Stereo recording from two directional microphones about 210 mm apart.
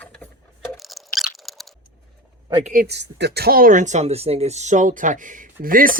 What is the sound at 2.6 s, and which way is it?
Speech, 45° right (ahead or behind).